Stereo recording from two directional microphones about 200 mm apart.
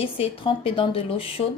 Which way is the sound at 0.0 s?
25° left (ahead or behind).